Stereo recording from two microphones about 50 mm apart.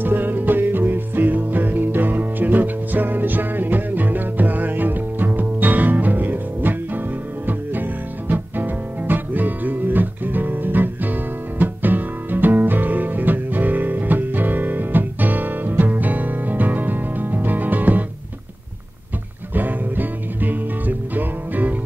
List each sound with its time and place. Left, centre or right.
0.0 s music: right
19.5 s music: right